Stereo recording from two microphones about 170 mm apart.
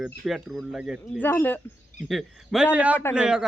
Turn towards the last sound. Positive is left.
turn(degrees=-5)  # may be behind; listen again after turning